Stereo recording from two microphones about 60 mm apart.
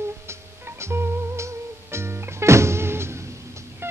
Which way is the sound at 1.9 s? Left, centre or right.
Right.